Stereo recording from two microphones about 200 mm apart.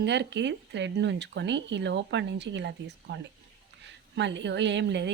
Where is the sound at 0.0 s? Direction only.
60° right (ahead or behind).